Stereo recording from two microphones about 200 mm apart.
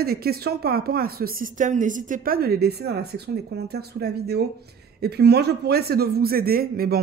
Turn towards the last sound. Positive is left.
turn(degrees=-50)  # may be behind; listen again after turning